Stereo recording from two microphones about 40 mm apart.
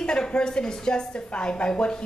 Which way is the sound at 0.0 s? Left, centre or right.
Left.